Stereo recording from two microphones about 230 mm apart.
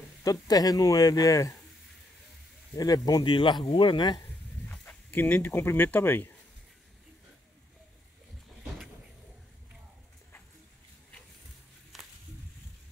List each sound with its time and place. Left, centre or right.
0.2 s speech: centre
2.7 s speech: centre
4.6 s speech: centre
11.9 s a sound: centre